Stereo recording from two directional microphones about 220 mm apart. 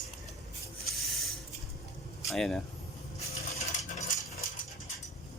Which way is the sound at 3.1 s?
30° left (ahead or behind).